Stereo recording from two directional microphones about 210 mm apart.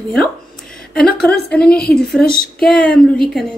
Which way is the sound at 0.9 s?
5° left (ahead or behind).